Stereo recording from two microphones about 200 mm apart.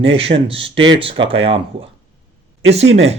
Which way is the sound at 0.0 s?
65° right (ahead or behind).